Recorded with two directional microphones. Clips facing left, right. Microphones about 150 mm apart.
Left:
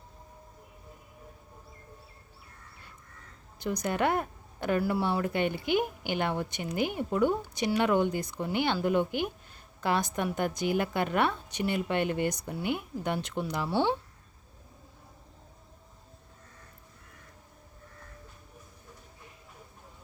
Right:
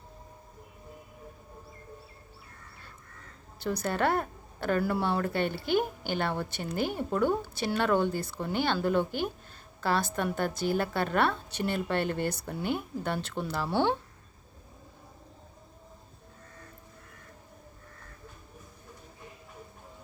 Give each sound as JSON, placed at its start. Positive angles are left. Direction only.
{"t": 3.6, "sound": "a woman's voice", "side_deg": 15}